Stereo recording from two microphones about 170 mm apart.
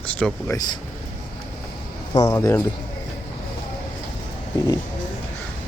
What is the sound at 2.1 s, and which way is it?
Speech, 15° left (ahead or behind).